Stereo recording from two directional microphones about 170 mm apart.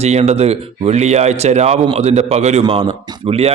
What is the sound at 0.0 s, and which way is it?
A man's voice, 40° right (ahead or behind).